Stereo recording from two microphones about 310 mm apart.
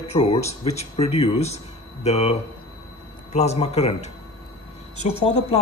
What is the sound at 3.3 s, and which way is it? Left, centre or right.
Speech, left.